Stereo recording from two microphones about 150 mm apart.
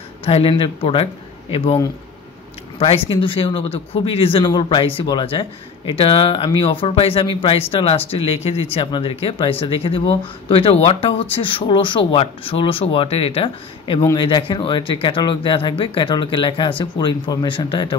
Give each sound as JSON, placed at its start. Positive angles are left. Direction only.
{"t": 0.2, "sound": "speech", "side_deg": 40}
{"t": 3.1, "sound": "speech", "side_deg": 35}